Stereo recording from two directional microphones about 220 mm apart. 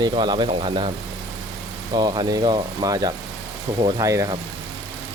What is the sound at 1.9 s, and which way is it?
Speech, 20° right (ahead or behind).